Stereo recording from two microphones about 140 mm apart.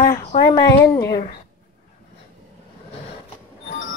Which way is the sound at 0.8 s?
20° left (ahead or behind).